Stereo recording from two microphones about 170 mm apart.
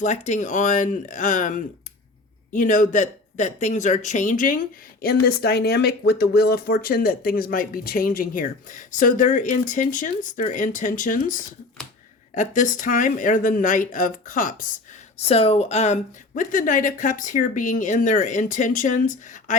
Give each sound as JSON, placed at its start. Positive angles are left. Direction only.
{"t": 0.0, "sound": "speech", "side_deg": 45}
{"t": 15.2, "sound": "speech", "side_deg": 35}